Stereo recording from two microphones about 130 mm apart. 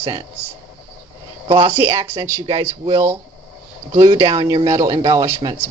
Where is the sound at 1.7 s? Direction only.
20° right (ahead or behind).